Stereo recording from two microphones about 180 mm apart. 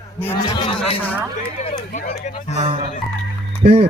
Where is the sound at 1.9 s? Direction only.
45° left (ahead or behind).